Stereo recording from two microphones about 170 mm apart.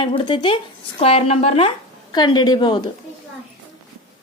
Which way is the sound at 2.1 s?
25° left (ahead or behind).